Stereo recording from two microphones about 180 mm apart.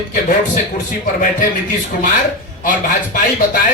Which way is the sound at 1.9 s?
50° left (ahead or behind).